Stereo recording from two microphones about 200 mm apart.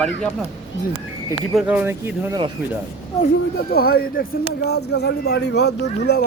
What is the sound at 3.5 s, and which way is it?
Speech, 50° left (ahead or behind).